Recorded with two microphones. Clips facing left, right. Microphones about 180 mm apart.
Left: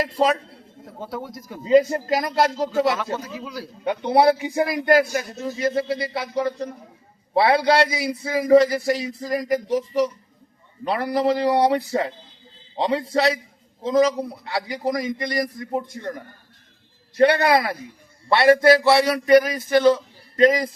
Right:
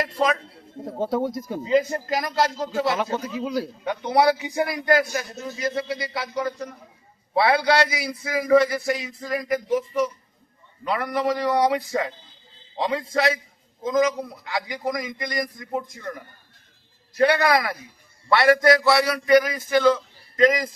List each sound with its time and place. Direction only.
0.9 s speech: 25° right (ahead or behind)
1.6 s a man's voice: 30° left (ahead or behind)
2.9 s speech: 20° right (ahead or behind)
3.8 s a man's voice: 30° left (ahead or behind)